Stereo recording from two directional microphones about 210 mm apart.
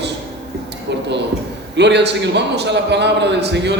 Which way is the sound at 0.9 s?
55° right (ahead or behind).